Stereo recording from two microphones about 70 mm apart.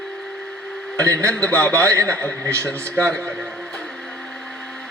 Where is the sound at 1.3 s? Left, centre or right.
Centre.